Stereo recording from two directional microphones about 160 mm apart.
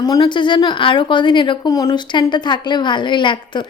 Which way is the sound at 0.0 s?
25° left (ahead or behind).